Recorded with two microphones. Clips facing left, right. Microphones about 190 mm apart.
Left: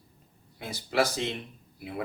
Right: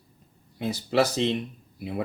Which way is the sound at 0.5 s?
20° right (ahead or behind).